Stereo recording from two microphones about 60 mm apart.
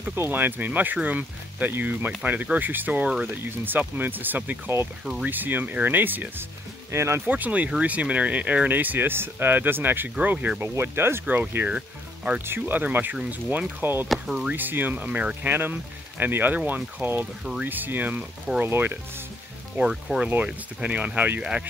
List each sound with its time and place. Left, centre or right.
0.1 s speech: right
6.9 s speech: right
7.2 s speech: right
10.8 s speech: right
11.2 s speech: right
14.0 s speech: centre
14.5 s speech: right
19.8 s speech: centre
20.4 s speech: centre